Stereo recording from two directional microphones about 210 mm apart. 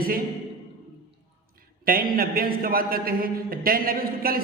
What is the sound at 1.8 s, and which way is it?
A man's voice, 45° right (ahead or behind).